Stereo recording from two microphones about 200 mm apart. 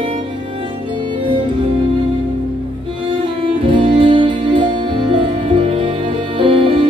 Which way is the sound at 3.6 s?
25° right (ahead or behind).